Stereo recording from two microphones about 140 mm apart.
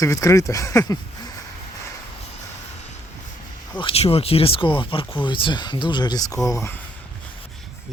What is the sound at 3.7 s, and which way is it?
Speech, 40° left (ahead or behind).